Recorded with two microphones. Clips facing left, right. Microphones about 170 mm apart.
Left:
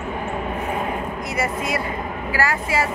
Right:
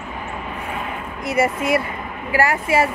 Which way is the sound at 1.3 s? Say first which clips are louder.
Right 7 dB; 30° right (ahead or behind).